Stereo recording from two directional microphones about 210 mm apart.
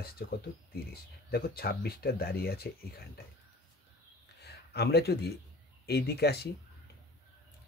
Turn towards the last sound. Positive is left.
turn(degrees=50)  # may be behind; listen again after turning